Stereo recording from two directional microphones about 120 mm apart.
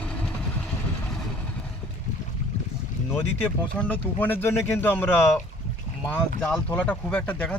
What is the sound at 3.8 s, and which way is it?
Speech, 15° left (ahead or behind).